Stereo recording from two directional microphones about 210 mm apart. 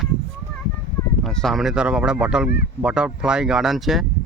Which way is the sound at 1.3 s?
Centre (ahead or behind).